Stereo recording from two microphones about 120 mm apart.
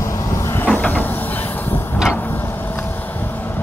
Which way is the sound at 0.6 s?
10° left (ahead or behind).